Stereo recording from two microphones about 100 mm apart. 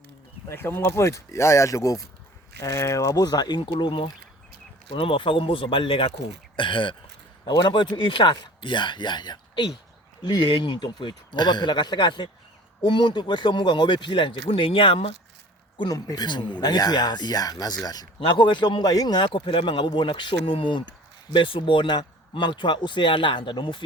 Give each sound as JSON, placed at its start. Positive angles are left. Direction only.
{"t": 0.4, "sound": "a man's voice", "side_deg": 25}
{"t": 4.9, "sound": "a man's voice", "side_deg": 65}
{"t": 15.8, "sound": "a man's voice", "side_deg": 40}
{"t": 18.2, "sound": "a man's voice", "side_deg": 55}